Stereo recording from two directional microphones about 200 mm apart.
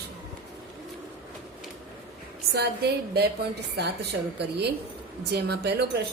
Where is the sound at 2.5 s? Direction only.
55° right (ahead or behind).